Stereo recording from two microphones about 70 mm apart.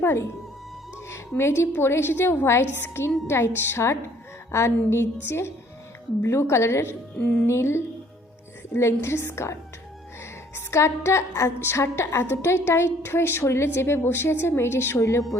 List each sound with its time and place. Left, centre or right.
0.0 s speech: left
1.4 s a woman's voice: left
7.2 s speech: centre
7.4 s a woman's voice: left